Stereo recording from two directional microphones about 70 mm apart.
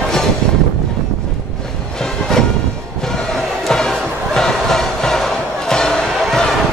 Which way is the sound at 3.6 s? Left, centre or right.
Centre.